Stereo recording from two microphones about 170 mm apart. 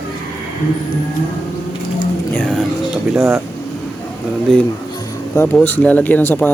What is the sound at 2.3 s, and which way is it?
Speech, 5° left (ahead or behind).